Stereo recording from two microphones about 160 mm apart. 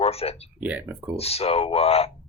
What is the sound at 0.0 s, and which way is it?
Speech, 40° left (ahead or behind).